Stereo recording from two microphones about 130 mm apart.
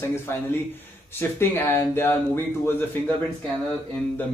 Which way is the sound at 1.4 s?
15° left (ahead or behind).